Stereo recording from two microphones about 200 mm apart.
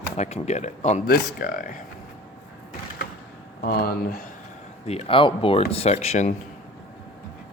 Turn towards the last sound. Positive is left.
turn(degrees=35)  # may be behind; listen again after turning